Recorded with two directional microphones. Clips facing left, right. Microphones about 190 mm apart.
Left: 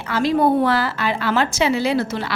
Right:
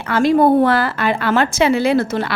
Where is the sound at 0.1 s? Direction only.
50° right (ahead or behind).